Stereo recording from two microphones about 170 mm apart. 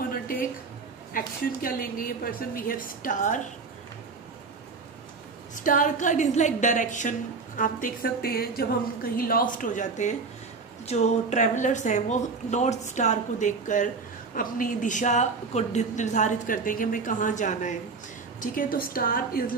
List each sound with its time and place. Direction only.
1.1 s a woman's voice: 55° left (ahead or behind)
5.6 s a woman's voice: 50° left (ahead or behind)